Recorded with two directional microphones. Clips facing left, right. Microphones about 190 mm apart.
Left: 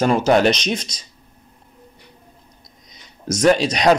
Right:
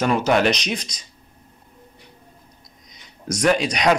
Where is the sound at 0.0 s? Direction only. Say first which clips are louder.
Left 3 dB; 30° left (ahead or behind).